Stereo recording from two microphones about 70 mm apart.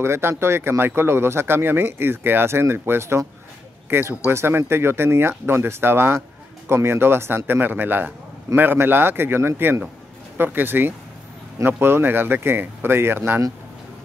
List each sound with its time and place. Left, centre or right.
0.0 s speech: right